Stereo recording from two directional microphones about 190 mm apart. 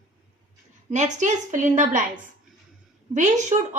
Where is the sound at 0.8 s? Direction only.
40° right (ahead or behind).